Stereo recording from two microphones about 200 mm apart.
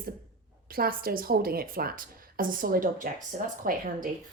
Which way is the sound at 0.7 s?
50° right (ahead or behind).